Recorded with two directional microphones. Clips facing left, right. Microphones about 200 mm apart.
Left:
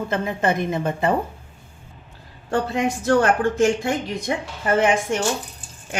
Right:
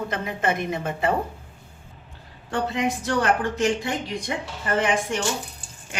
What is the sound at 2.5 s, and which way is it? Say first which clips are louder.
A woman's voice: left 3 dB; 45° left (ahead or behind).